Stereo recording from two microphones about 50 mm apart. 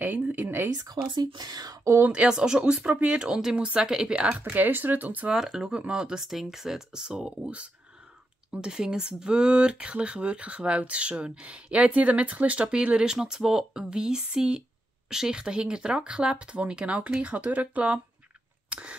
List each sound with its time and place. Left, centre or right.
0.4 s speech: right
2.2 s speech: centre
3.5 s speech: right
4.5 s speech: right
5.3 s speech: centre
6.2 s speech: centre; by 18.0 s right
18.7 s a sound: right